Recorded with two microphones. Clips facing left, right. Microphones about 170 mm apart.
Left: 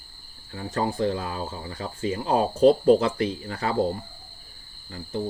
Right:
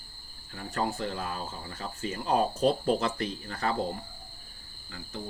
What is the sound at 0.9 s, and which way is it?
Speech, 15° left (ahead or behind).